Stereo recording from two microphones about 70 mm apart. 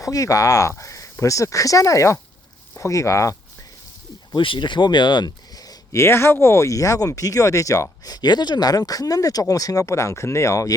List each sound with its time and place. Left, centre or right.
0.0 s speech: left
4.3 s speech: left
6.0 s speech: left